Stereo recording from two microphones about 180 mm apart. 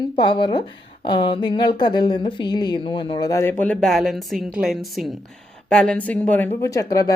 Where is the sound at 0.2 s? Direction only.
25° left (ahead or behind).